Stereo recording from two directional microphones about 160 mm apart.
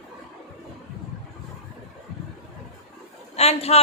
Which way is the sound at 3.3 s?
40° left (ahead or behind).